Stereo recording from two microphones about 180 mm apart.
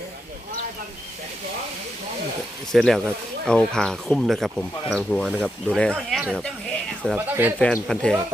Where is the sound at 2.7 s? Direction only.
Centre (ahead or behind).